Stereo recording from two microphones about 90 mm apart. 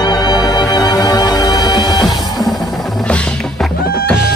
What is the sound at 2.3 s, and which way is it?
Music, centre (ahead or behind).